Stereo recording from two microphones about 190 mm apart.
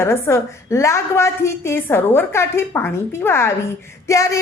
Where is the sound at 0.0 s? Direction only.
15° left (ahead or behind).